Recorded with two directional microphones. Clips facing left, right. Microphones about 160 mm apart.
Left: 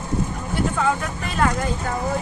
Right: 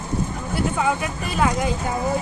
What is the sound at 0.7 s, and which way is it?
Speech, 10° right (ahead or behind).